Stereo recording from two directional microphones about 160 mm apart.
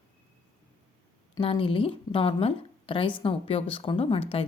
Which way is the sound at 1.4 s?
35° left (ahead or behind).